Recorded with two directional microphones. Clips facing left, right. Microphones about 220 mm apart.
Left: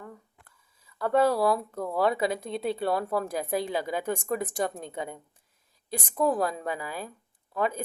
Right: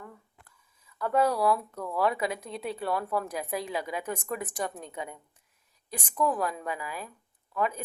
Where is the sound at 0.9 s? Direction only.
30° left (ahead or behind).